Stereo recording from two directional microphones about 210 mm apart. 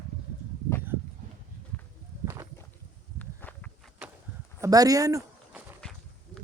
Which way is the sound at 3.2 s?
5° left (ahead or behind).